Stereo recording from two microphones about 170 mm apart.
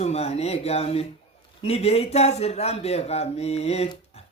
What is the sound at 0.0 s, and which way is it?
Speech, 40° left (ahead or behind).